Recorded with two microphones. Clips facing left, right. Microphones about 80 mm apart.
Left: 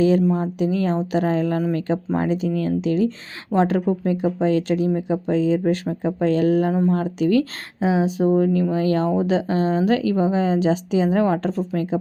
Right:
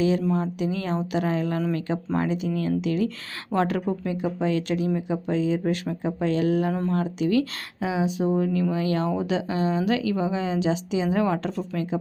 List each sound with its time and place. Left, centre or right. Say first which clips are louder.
0.0 s speech: left 6 dB; left
0.3 s speech: left 3 dB; centre
0.6 s speech: left 5 dB; left
6.7 s speech: left 6 dB; centre
7.0 s speech: left 4 dB; left
7.8 s speech: left 5 dB; left